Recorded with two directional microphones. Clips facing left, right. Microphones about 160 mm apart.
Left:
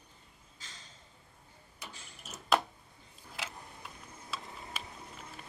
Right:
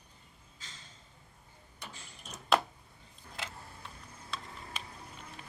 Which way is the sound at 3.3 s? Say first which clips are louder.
Even; 5° left (ahead or behind).